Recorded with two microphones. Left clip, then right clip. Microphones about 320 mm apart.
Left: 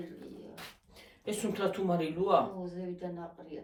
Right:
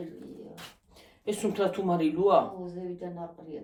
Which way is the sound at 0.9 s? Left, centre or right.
Centre.